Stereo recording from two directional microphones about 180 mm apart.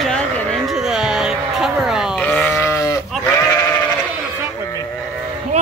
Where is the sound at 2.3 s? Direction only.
10° left (ahead or behind).